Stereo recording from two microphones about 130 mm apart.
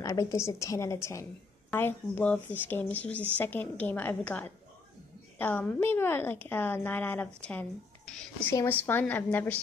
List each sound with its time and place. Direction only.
0.0 s a woman's voice: 25° left (ahead or behind)